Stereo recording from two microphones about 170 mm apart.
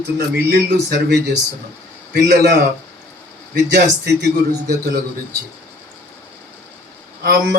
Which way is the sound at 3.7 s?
75° right (ahead or behind).